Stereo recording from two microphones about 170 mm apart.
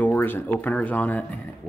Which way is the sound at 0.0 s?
10° left (ahead or behind).